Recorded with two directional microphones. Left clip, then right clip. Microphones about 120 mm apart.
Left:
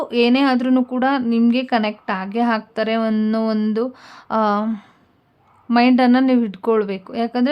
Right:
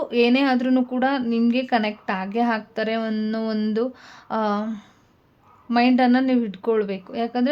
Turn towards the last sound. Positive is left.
turn(degrees=30)  # may be behind; listen again after turning